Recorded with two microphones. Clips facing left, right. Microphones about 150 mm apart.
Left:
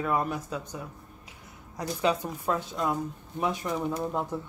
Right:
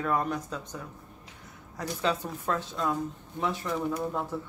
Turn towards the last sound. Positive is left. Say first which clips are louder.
# left 1 dB
turn(degrees=15)  # may be behind; listen again after turning